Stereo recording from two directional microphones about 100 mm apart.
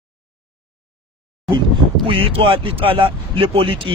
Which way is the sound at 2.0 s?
65° right (ahead or behind).